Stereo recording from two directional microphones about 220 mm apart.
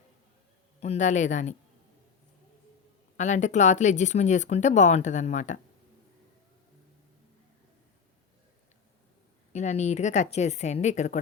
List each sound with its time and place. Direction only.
0.8 s speech: 30° left (ahead or behind)
3.2 s speech: 35° left (ahead or behind)
9.5 s speech: 30° left (ahead or behind)